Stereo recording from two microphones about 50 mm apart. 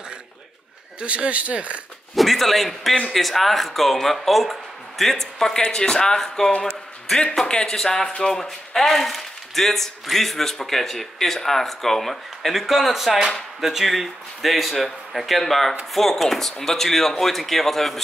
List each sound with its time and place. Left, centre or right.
1.0 s speech: right
2.1 s a man's voice: centre